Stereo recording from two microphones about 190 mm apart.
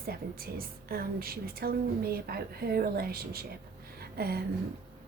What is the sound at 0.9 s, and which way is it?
A woman's voice, 55° right (ahead or behind).